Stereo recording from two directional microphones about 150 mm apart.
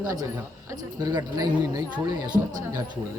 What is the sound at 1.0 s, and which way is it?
Speech, 25° right (ahead or behind).